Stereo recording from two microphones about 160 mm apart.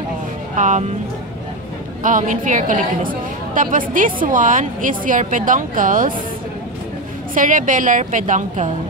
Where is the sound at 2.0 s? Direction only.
55° right (ahead or behind).